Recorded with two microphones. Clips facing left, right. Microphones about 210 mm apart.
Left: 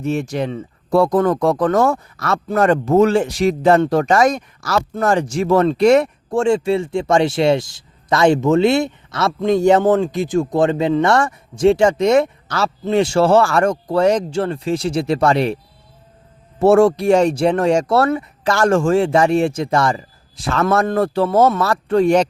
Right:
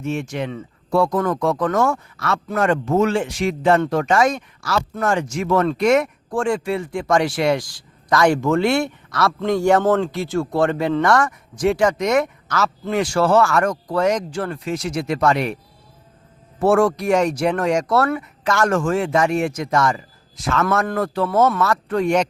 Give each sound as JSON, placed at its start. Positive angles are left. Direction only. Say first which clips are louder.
{"t": 0.0, "sound": "speech", "louder": "left 4 dB", "side_deg": 35}
{"t": 16.6, "sound": "speech", "louder": "left 5 dB", "side_deg": 25}